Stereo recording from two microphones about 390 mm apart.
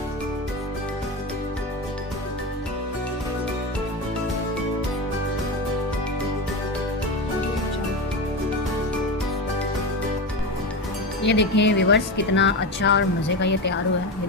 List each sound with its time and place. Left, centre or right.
11.2 s speech: left